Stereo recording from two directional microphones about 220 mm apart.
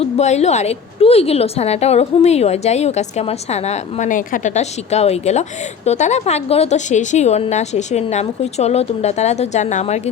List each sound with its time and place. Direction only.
0.0 s a woman's voice: 30° left (ahead or behind)